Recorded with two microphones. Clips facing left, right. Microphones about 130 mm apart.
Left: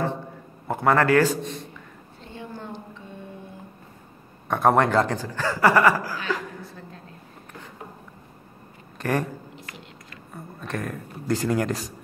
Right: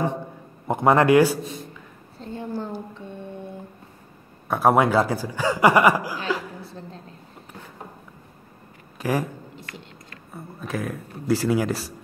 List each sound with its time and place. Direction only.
0.7 s a man's voice: 20° right (ahead or behind); by 1.7 s 5° right (ahead or behind)
2.1 s a sound: 35° right (ahead or behind)
2.9 s music: 30° right (ahead or behind)
4.5 s a man's voice: 5° right (ahead or behind)
6.6 s a sound: 30° right (ahead or behind)
8.9 s speech: 5° right (ahead or behind)
10.3 s speech: 5° right (ahead or behind)